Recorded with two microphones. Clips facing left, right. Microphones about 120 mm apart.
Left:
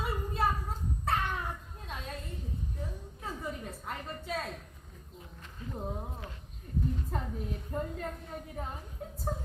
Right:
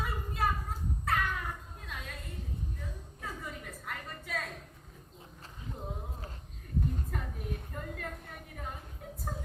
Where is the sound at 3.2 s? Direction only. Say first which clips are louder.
Left 3 dB; 30° left (ahead or behind).